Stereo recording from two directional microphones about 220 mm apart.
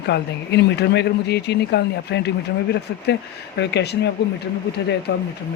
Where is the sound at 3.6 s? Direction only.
50° left (ahead or behind).